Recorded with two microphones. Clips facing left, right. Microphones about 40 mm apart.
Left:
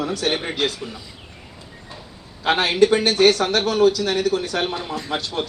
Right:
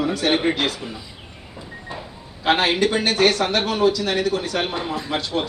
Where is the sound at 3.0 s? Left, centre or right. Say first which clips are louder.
Left 2 dB; right.